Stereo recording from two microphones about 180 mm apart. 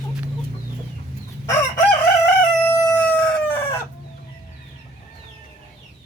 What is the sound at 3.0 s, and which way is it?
Crowing, 10° left (ahead or behind).